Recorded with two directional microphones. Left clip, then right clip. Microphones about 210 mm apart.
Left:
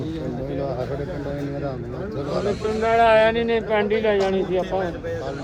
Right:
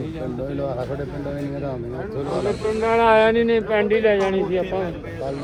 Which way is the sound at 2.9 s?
50° right (ahead or behind).